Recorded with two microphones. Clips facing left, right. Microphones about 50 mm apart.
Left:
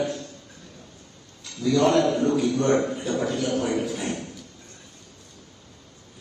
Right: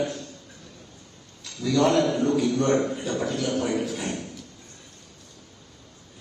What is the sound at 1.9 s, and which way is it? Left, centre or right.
A man's voice, left.